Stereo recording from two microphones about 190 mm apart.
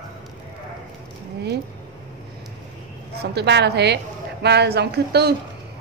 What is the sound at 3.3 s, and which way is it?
A woman's voice, 65° right (ahead or behind).